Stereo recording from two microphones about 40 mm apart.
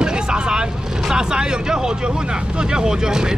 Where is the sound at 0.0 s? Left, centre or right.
Centre.